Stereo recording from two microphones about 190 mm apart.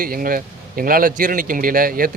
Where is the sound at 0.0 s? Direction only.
50° right (ahead or behind).